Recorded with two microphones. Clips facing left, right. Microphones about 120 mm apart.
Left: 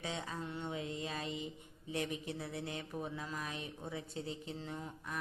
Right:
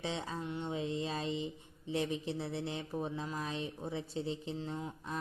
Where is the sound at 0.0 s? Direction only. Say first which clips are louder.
Right 3 dB; 25° right (ahead or behind).